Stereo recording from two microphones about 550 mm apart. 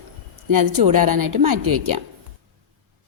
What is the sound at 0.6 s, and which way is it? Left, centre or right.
Speech, right.